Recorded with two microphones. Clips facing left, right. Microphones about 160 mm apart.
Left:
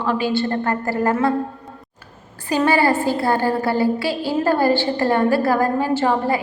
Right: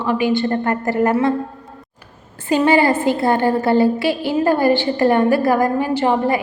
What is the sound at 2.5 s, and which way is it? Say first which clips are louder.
A woman's voice: right 3 dB; 20° right (ahead or behind).